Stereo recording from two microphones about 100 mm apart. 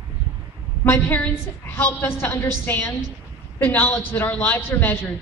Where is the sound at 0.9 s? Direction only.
20° left (ahead or behind).